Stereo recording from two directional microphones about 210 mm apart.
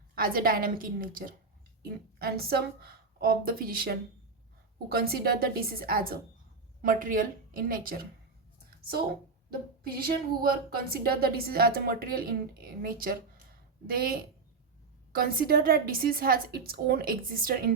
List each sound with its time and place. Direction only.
0.2 s a woman's voice: 45° right (ahead or behind)
9.8 s a woman's voice: 45° right (ahead or behind)